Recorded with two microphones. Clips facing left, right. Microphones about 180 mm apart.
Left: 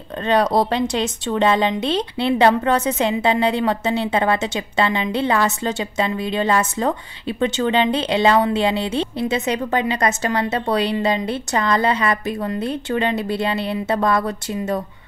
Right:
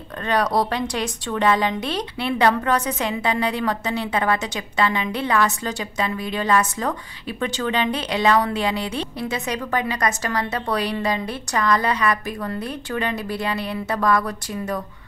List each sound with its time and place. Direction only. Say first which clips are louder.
0.3 s speech: left 4 dB; 25° left (ahead or behind)